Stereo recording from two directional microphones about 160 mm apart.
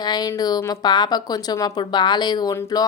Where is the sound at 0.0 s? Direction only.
25° left (ahead or behind).